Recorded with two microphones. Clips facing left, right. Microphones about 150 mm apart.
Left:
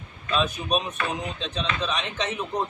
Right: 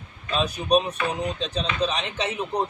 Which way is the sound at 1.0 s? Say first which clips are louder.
Right 2 dB; 15° right (ahead or behind).